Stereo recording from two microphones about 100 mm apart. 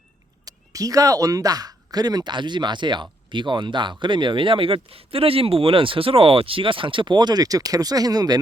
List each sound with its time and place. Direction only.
0.4 s speech: 35° right (ahead or behind)